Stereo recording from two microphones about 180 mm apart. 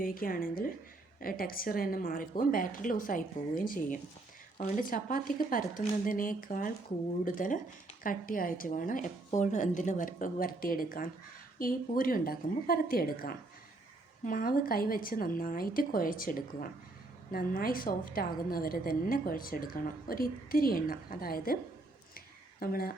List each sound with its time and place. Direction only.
0.0 s a woman's voice: 50° left (ahead or behind)
4.5 s speech: 35° left (ahead or behind)
4.8 s a woman's voice: 50° left (ahead or behind)
22.6 s speech: 55° left (ahead or behind)